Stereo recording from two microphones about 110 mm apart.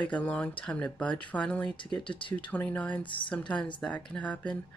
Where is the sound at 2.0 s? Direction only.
50° left (ahead or behind).